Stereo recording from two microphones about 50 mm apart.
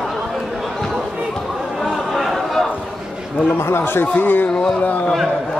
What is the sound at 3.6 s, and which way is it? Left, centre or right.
Speech, left.